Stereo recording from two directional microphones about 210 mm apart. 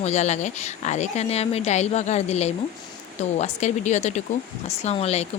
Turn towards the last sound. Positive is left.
turn(degrees=30)  # may be behind; listen again after turning